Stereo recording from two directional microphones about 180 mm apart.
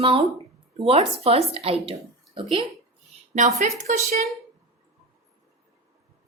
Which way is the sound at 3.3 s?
40° right (ahead or behind).